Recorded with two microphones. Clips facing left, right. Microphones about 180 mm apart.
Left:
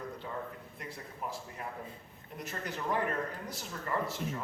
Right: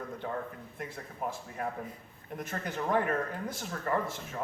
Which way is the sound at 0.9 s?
50° right (ahead or behind).